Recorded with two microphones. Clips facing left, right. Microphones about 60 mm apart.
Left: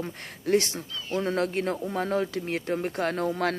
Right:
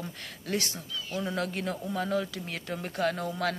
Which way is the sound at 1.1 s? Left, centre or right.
Left.